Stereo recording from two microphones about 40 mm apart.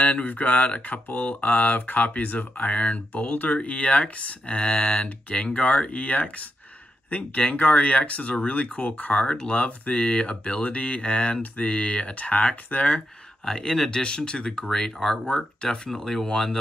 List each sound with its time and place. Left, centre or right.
0.0 s speech: left
0.7 s speech: left
13.5 s speech: centre
15.9 s speech: centre